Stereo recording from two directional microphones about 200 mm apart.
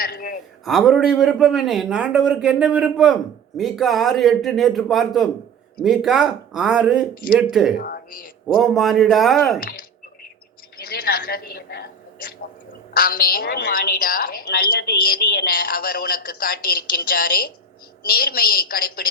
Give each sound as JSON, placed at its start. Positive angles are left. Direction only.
{"t": 0.0, "sound": "a woman's voice", "side_deg": 50}
{"t": 0.6, "sound": "a man's voice", "side_deg": 0}
{"t": 7.8, "sound": "a woman's voice", "side_deg": 45}
{"t": 8.5, "sound": "a man's voice", "side_deg": 0}
{"t": 11.1, "sound": "a sound", "side_deg": 50}
{"t": 13.0, "sound": "a woman's voice", "side_deg": 45}